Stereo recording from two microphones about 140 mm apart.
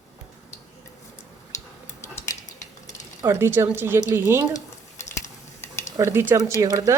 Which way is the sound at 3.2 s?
15° right (ahead or behind).